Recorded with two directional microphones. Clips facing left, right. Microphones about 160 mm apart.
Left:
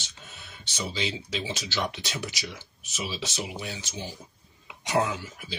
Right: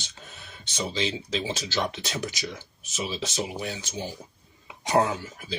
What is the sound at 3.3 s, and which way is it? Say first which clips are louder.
Speech: right 4 dB; 50° right (ahead or behind).